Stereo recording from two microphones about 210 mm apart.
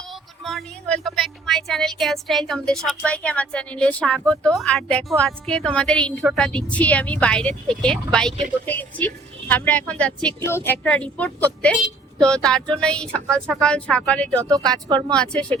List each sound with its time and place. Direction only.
0.4 s a woman's voice: centre (ahead or behind)
14.4 s speech: 15° right (ahead or behind)
15.1 s speech: 5° left (ahead or behind)